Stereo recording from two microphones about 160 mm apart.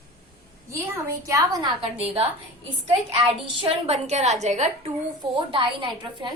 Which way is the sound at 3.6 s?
40° right (ahead or behind).